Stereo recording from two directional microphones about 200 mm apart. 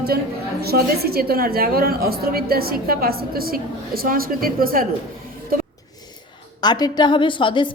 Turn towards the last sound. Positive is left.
turn(degrees=25)  # may be behind; listen again after turning